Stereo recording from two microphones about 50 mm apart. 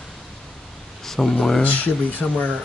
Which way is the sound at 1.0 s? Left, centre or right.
Centre.